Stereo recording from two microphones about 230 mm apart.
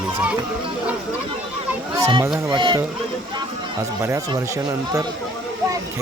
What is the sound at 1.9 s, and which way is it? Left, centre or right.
Speech, centre.